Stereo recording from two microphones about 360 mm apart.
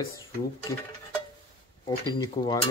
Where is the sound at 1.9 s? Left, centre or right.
Centre.